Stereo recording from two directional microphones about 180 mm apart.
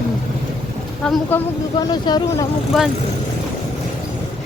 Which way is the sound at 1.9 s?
25° left (ahead or behind).